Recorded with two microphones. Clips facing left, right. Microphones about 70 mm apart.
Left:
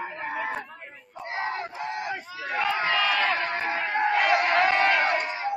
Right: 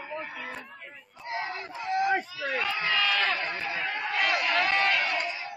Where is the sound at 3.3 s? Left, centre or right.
Left.